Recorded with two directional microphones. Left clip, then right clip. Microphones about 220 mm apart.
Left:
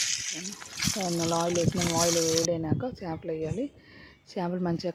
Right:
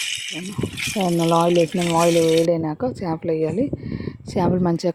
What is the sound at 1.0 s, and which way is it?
Speech, 45° right (ahead or behind).